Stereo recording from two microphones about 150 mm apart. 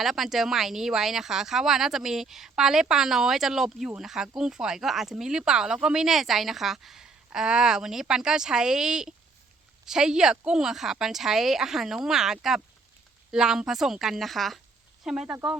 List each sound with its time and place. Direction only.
0.0 s speech: centre (ahead or behind)